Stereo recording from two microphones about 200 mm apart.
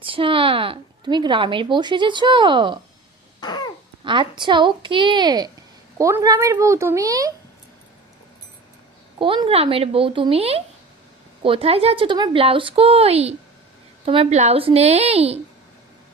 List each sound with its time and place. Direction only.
0.0 s speech: 25° right (ahead or behind)
3.4 s a sound: 20° left (ahead or behind)
4.0 s speech: 25° right (ahead or behind)
9.1 s a woman's voice: 25° right (ahead or behind)